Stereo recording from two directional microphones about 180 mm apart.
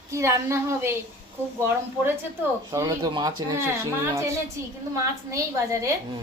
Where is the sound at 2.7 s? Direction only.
20° right (ahead or behind).